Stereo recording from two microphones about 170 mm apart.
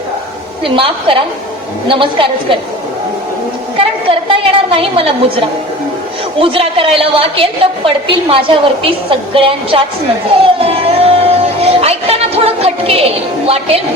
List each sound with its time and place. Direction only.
0.6 s a woman's voice: 30° right (ahead or behind)
4.3 s a woman's voice: 30° right (ahead or behind)
6.4 s a woman's voice: 30° right (ahead or behind)
10.4 s a sound: 35° right (ahead or behind)